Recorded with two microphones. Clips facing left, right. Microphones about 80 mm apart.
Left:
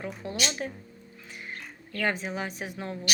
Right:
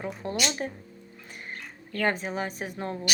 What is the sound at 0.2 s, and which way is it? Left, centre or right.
Speech, right.